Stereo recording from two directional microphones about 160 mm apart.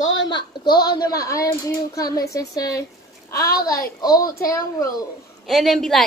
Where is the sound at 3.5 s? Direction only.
70° left (ahead or behind).